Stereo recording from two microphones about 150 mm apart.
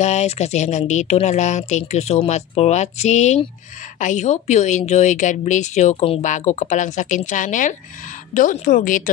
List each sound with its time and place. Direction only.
0.0 s speech: 50° left (ahead or behind)